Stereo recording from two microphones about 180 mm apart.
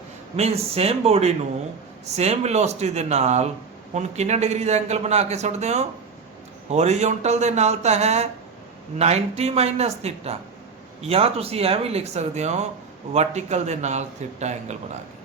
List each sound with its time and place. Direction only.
0.3 s speech: 35° right (ahead or behind)